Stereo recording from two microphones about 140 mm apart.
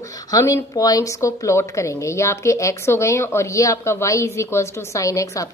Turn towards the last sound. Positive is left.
turn(degrees=25)  # may be behind; listen again after turning